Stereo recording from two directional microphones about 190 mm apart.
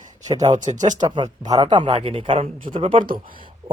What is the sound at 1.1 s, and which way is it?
Speech, 20° right (ahead or behind).